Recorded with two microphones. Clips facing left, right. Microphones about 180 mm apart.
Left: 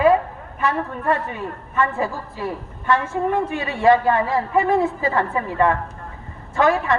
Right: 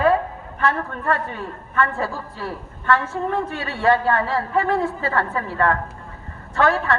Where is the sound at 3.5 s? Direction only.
15° left (ahead or behind).